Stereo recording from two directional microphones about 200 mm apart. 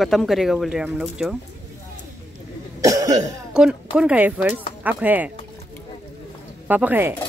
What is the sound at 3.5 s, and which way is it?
Speech, 5° right (ahead or behind).